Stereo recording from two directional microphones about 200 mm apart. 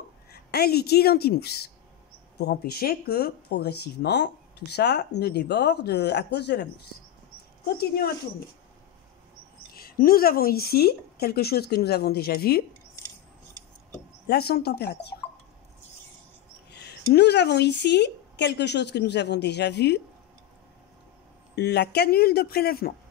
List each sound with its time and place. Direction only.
0.3 s a woman's voice: 50° left (ahead or behind)
9.8 s speech: 45° left (ahead or behind)
14.2 s speech: 50° left (ahead or behind)
16.7 s speech: 55° left (ahead or behind)
21.5 s speech: 55° left (ahead or behind)